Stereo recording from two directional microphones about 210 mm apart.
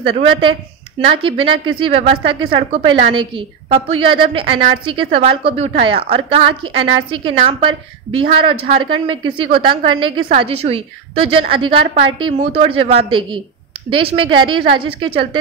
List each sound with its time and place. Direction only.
0.0 s a woman's voice: 25° right (ahead or behind)